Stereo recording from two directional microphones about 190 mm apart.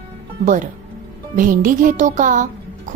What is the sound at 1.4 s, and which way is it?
A child's voice, 45° right (ahead or behind).